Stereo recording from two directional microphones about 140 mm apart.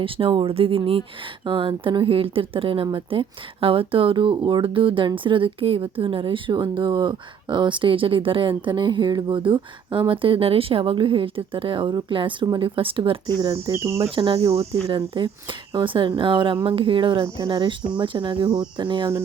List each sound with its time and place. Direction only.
0.0 s speech: 40° right (ahead or behind)
14.5 s speech: 45° right (ahead or behind)